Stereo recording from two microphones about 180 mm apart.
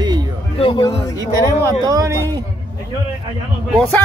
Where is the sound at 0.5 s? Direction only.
25° left (ahead or behind).